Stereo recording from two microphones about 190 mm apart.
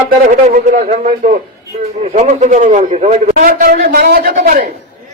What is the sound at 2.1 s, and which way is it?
A man's voice, 40° right (ahead or behind).